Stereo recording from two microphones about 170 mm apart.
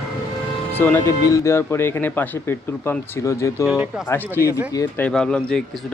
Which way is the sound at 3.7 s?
5° right (ahead or behind).